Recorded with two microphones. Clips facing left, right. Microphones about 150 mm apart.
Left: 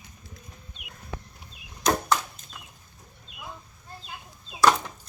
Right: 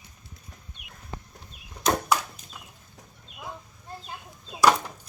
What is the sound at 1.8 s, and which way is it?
Chop, 10° right (ahead or behind).